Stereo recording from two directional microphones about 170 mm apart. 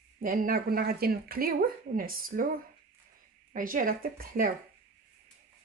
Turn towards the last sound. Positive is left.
turn(degrees=-55)  # may be behind; listen again after turning